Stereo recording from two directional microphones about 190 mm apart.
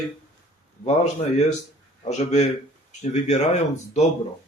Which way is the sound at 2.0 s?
35° left (ahead or behind).